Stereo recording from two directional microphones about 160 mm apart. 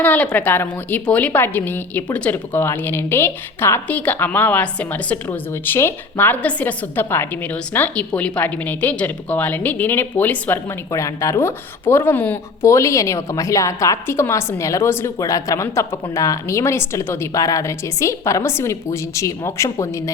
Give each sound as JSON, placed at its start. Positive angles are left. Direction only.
{"t": 0.0, "sound": "a woman's voice", "side_deg": 10}